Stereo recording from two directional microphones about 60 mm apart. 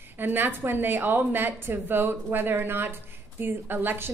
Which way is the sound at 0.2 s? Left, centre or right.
Right.